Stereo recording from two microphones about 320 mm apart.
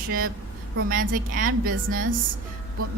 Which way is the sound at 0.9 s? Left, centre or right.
Right.